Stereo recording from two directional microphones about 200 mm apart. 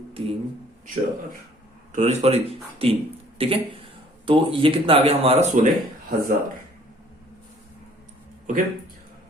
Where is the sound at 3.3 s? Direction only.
30° right (ahead or behind).